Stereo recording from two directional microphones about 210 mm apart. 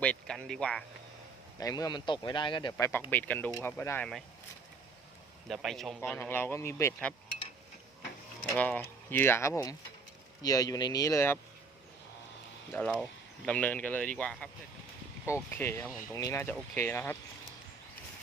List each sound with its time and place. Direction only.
0.0 s speech: 5° left (ahead or behind)
1.5 s speech: 15° left (ahead or behind)
5.5 s speech: centre (ahead or behind)
8.4 s speech: 5° left (ahead or behind)
12.7 s speech: 5° left (ahead or behind)